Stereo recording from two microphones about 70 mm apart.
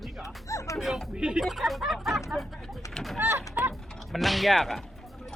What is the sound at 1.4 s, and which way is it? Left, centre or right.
Speech, centre.